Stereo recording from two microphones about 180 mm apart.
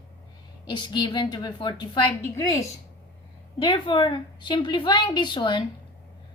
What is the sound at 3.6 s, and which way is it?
A woman's voice, 25° left (ahead or behind).